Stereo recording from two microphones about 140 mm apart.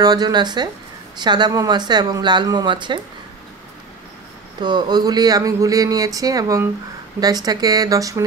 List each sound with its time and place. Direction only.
0.0 s speech: 30° right (ahead or behind)
4.6 s speech: 30° right (ahead or behind)